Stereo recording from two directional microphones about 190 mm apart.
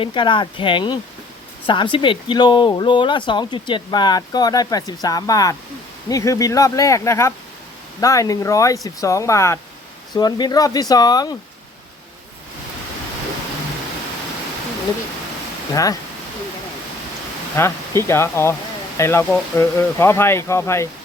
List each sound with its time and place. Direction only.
0.0 s speech: 25° left (ahead or behind)
15.7 s speech: 20° left (ahead or behind)
17.6 s speech: 15° left (ahead or behind)